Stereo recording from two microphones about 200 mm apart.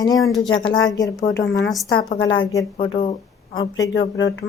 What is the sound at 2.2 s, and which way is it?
Speech, 75° left (ahead or behind).